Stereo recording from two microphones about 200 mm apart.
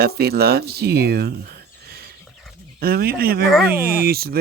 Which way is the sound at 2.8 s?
50° right (ahead or behind).